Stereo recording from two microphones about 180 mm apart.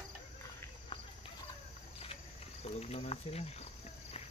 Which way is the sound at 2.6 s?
35° left (ahead or behind).